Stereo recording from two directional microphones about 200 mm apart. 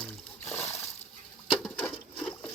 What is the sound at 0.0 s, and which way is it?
Splash, 10° left (ahead or behind).